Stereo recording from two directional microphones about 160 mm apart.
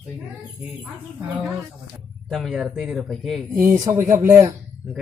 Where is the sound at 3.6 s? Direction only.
15° right (ahead or behind).